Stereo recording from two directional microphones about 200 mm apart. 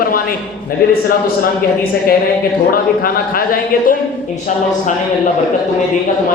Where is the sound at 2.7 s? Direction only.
45° left (ahead or behind).